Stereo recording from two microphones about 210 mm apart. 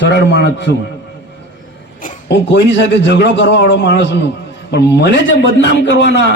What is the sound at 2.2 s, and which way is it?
A man's voice, 55° left (ahead or behind).